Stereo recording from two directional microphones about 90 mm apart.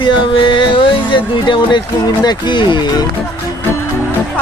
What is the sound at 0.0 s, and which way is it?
Music, 70° left (ahead or behind).